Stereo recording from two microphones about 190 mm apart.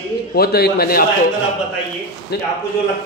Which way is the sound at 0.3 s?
55° left (ahead or behind).